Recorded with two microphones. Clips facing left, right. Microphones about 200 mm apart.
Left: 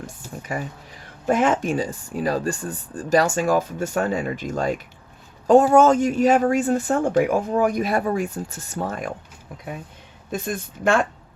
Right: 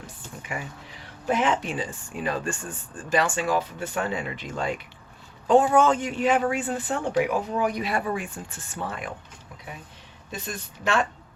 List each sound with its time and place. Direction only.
0.4 s speech: 40° left (ahead or behind)
10.3 s speech: 50° left (ahead or behind)